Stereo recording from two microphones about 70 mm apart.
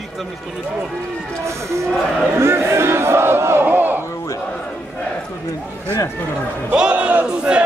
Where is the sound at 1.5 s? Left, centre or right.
Right.